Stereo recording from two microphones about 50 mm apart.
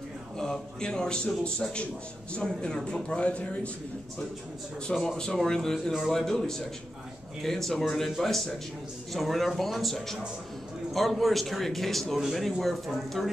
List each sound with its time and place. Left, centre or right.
0.4 s speech: centre
4.8 s a man's voice: centre